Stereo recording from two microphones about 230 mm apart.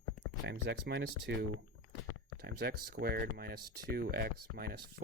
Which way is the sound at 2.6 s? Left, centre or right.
Right.